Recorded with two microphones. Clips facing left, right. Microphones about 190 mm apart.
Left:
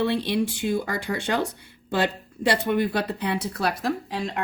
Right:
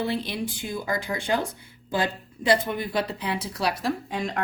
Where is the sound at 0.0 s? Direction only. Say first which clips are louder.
Left 5 dB; 75° left (ahead or behind).